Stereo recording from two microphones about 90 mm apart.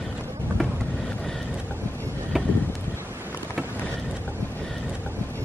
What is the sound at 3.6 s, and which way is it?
Boat, 20° left (ahead or behind).